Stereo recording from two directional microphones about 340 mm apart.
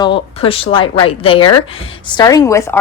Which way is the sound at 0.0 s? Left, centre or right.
Centre.